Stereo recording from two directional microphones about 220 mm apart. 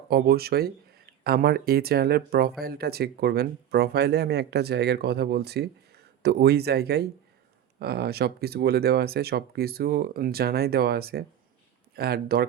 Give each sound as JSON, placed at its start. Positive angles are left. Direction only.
{"t": 0.1, "sound": "speech", "side_deg": -45}